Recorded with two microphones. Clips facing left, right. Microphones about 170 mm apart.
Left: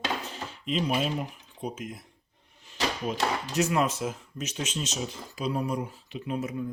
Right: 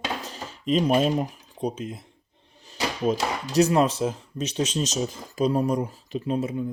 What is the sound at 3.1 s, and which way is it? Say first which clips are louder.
Speech: right 4 dB; 45° right (ahead or behind).